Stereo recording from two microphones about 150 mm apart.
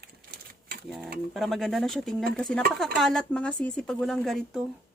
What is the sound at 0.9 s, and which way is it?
Speech, centre (ahead or behind).